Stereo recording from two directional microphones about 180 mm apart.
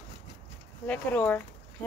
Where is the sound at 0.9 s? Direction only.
10° left (ahead or behind).